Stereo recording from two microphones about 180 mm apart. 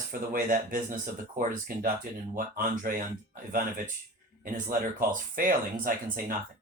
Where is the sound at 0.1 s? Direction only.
50° right (ahead or behind).